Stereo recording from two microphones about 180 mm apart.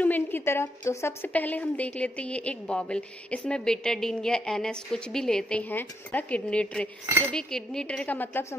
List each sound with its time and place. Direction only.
0.0 s a woman's voice: 10° left (ahead or behind)